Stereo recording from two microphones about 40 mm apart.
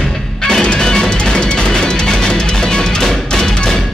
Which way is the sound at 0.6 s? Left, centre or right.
Left.